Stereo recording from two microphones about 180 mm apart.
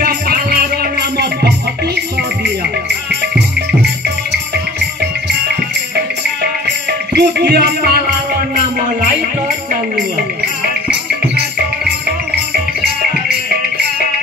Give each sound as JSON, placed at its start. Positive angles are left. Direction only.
{"t": 0.0, "sound": "music", "side_deg": -60}
{"t": 7.2, "sound": "music", "side_deg": -65}